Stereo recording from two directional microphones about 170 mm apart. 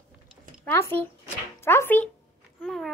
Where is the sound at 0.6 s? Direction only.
15° left (ahead or behind).